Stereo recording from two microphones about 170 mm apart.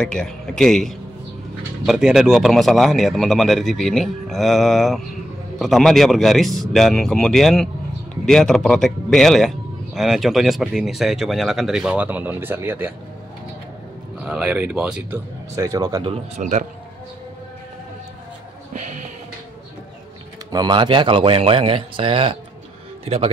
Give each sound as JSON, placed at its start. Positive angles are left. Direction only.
{"t": 0.0, "sound": "a man's voice", "side_deg": 5}
{"t": 14.2, "sound": "speech", "side_deg": -5}
{"t": 15.5, "sound": "speech", "side_deg": -20}
{"t": 16.1, "sound": "speech", "side_deg": -45}
{"t": 18.7, "sound": "music", "side_deg": -45}
{"t": 20.5, "sound": "a man's voice", "side_deg": -25}